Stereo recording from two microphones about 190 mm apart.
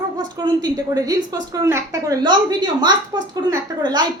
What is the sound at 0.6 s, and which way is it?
A woman's voice, 20° right (ahead or behind).